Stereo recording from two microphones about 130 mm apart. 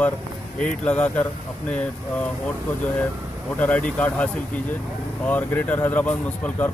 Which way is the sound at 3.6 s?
10° left (ahead or behind).